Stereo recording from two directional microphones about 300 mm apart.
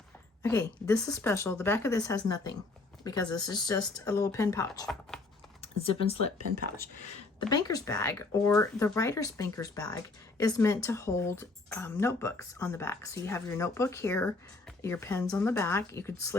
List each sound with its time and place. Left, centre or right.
0.4 s speech: centre
7.3 s speech: centre